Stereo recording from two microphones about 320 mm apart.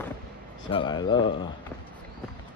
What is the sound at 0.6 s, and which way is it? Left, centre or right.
Speech, centre.